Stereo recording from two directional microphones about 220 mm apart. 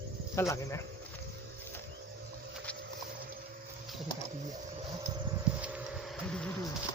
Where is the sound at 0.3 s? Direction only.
15° left (ahead or behind).